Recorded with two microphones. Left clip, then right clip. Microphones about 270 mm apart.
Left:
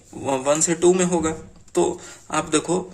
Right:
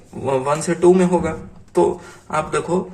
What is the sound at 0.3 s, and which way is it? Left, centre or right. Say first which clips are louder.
A man's voice: right 1 dB; left.